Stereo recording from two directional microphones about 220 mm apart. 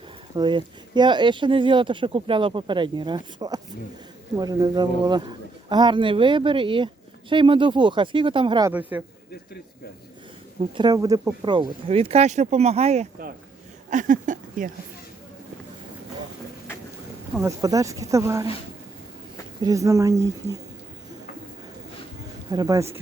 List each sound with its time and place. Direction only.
0.3 s a man's voice: 20° right (ahead or behind)
8.7 s speech: 10° right (ahead or behind)
10.6 s a man's voice: 20° right (ahead or behind); by 13.3 s 35° right (ahead or behind)
13.9 s a sound: 35° right (ahead or behind)
17.3 s speech: 15° right (ahead or behind)
19.6 s speech: 15° right (ahead or behind)
22.5 s speech: 15° right (ahead or behind)